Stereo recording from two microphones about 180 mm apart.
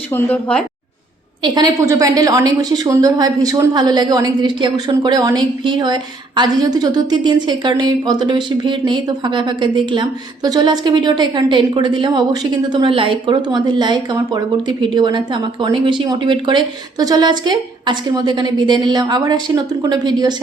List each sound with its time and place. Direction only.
0.1 s a woman's voice: 10° left (ahead or behind)
1.4 s a woman's voice: 20° right (ahead or behind)